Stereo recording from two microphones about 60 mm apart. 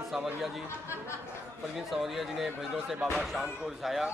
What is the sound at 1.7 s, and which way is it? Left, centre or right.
A man's voice, centre.